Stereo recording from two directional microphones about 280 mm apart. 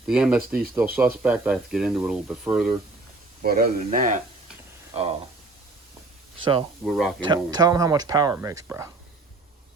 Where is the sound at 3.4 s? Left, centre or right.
Right.